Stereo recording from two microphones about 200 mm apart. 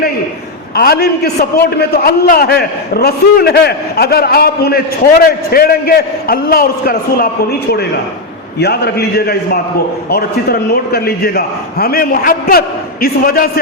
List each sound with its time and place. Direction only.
0.8 s a man's voice: 50° left (ahead or behind)
8.5 s a man's voice: 55° left (ahead or behind)